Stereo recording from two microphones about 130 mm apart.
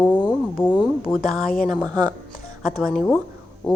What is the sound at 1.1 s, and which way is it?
A woman's voice, 5° left (ahead or behind).